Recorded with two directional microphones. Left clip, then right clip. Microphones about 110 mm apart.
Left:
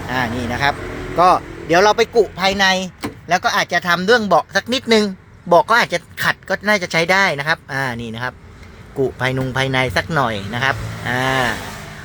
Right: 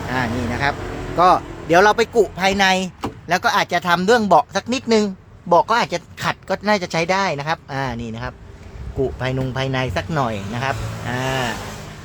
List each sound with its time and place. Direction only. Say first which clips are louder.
0.3 s speech: left 3 dB; centre (ahead or behind)
1.2 s speech: left 1 dB; 25° right (ahead or behind)
2.1 s speech: left 1 dB; 40° right (ahead or behind); by 4.6 s 20° right (ahead or behind)
4.7 s speech: left 3 dB; centre (ahead or behind)
5.9 s speech: left 4 dB; 15° right (ahead or behind); by 11.1 s 5° left (ahead or behind)
11.1 s a sound: left 5 dB; 25° left (ahead or behind)